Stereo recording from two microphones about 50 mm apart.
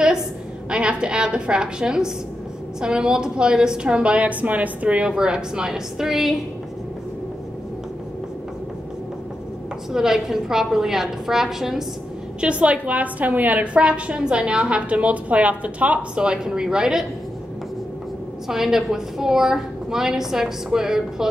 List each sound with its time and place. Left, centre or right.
0.7 s a woman's voice: centre
9.9 s a woman's voice: centre
12.4 s a woman's voice: right
16.2 s a woman's voice: centre
18.5 s a woman's voice: centre